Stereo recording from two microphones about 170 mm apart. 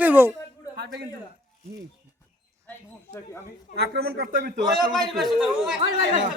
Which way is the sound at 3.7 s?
70° right (ahead or behind).